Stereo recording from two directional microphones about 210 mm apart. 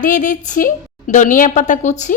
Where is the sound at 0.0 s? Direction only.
35° left (ahead or behind).